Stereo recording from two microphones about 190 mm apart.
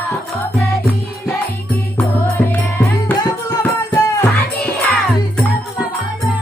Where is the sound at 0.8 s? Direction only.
10° left (ahead or behind).